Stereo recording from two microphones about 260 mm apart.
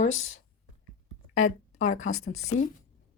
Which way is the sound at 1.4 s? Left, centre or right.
Left.